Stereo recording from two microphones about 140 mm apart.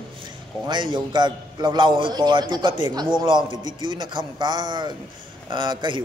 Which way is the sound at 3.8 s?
35° right (ahead or behind).